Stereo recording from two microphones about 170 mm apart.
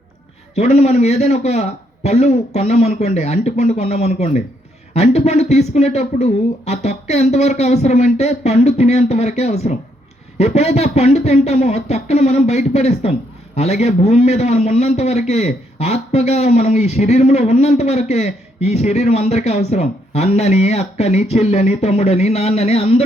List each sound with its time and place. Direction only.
0.5 s a man's voice: 40° left (ahead or behind)